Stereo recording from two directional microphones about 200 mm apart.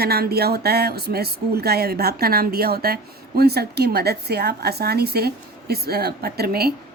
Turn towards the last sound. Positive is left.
turn(degrees=-50)  # may be behind; listen again after turning